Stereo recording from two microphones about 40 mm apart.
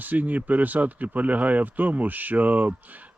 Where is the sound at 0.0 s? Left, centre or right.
Right.